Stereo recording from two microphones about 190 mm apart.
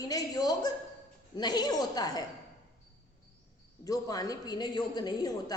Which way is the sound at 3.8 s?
20° left (ahead or behind).